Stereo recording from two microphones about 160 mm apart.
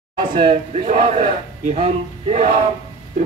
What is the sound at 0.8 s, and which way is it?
Speech, 45° right (ahead or behind).